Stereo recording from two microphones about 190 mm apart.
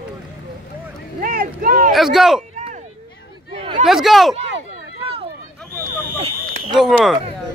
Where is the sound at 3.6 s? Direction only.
30° right (ahead or behind).